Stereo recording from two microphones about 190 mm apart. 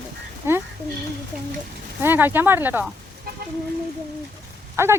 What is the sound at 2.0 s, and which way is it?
Speech, 10° right (ahead or behind).